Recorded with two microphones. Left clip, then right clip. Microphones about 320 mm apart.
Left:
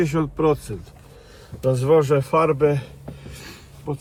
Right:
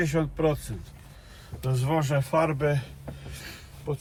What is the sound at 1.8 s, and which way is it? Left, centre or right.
Speech, centre.